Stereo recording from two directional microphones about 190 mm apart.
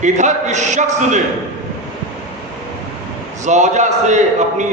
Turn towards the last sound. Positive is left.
turn(degrees=-40)  # may be behind; listen again after turning